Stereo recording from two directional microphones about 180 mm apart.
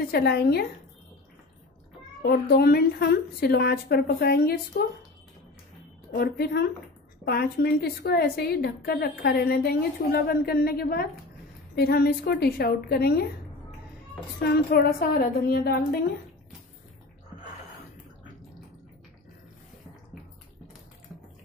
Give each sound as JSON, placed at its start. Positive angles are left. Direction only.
{"t": 0.1, "sound": "a woman's voice", "side_deg": 60}
{"t": 2.2, "sound": "a woman's voice", "side_deg": 55}
{"t": 6.1, "sound": "a woman's voice", "side_deg": 60}
{"t": 14.4, "sound": "a woman's voice", "side_deg": 60}